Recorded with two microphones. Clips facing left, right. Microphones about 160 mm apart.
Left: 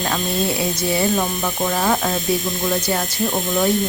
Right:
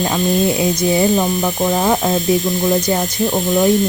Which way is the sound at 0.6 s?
20° right (ahead or behind).